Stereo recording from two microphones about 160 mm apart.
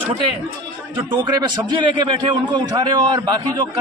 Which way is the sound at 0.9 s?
30° right (ahead or behind).